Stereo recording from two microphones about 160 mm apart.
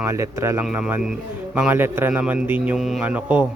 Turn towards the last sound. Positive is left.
turn(degrees=-10)  # may be behind; listen again after turning